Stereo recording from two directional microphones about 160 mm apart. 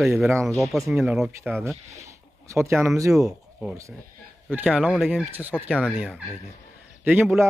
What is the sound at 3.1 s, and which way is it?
Speech, centre (ahead or behind).